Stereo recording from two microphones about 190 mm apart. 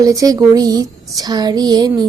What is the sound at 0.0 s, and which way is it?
Speech, 20° right (ahead or behind).